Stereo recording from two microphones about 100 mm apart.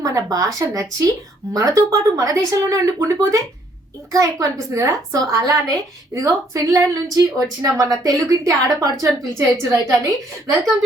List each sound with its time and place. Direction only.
0.0 s a woman's voice: 40° right (ahead or behind)